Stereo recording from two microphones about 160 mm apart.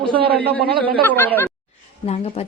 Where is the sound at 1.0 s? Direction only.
10° left (ahead or behind).